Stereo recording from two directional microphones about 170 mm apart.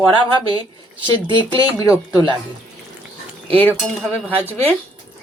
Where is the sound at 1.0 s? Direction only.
30° right (ahead or behind).